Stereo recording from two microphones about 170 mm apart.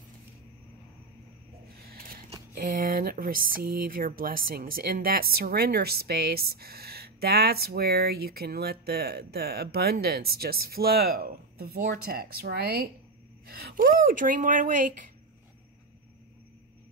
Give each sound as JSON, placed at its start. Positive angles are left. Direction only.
{"t": 1.9, "sound": "scissors", "side_deg": -60}
{"t": 2.5, "sound": "speech", "side_deg": -50}